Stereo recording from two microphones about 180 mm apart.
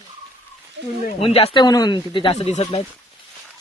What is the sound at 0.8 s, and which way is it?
Speech, 75° right (ahead or behind).